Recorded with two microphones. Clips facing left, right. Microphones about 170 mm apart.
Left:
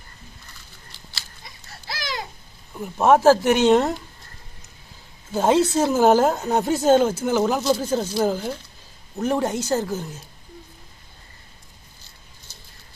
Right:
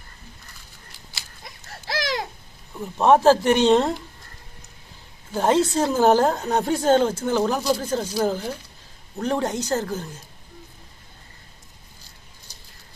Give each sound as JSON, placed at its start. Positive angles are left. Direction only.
{"t": 2.7, "sound": "speech", "side_deg": 5}
{"t": 5.3, "sound": "a woman's voice", "side_deg": 10}